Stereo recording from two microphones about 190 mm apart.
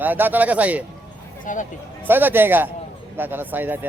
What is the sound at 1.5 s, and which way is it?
Speech, 40° left (ahead or behind).